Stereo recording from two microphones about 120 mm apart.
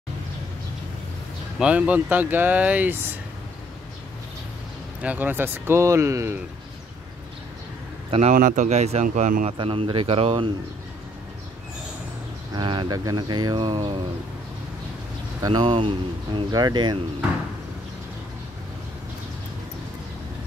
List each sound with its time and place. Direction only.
1.6 s speech: 10° right (ahead or behind)
5.0 s speech: 15° right (ahead or behind)
8.1 s speech: 70° right (ahead or behind); by 9.5 s 85° right
9.5 s speech: 50° right (ahead or behind)
12.5 s speech: 40° right (ahead or behind)
15.4 s speech: 40° right (ahead or behind)